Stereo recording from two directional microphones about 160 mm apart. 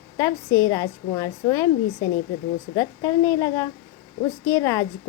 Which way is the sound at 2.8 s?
20° left (ahead or behind).